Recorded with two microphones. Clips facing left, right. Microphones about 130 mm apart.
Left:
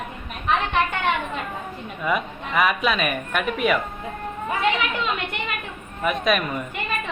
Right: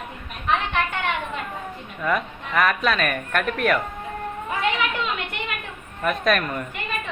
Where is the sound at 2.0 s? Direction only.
10° left (ahead or behind).